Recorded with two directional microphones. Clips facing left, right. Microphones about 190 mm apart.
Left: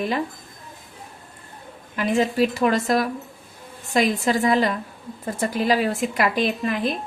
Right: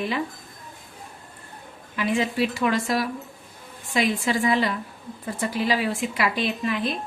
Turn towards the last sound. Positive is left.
turn(degrees=45)  # may be behind; listen again after turning